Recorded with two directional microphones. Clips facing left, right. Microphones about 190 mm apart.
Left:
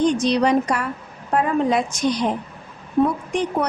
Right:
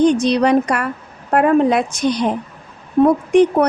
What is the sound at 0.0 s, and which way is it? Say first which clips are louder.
A woman's voice: right 4 dB; 60° right (ahead or behind).